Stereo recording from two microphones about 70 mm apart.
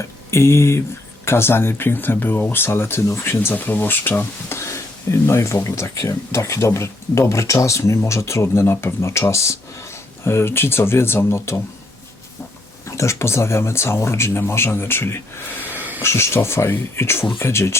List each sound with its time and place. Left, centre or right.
0.0 s speech: left
4.4 s speech: left
13.0 s speech: left
15.7 s a sound: right
16.0 s speech: left